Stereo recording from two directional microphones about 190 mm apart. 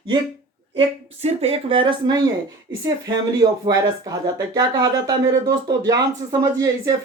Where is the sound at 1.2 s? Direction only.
30° right (ahead or behind).